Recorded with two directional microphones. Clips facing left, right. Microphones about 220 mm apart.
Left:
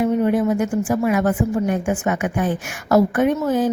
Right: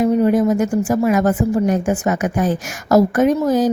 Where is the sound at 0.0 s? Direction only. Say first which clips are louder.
Right 3 dB; 40° right (ahead or behind).